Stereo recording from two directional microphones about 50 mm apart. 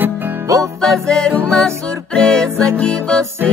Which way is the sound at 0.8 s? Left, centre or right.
Centre.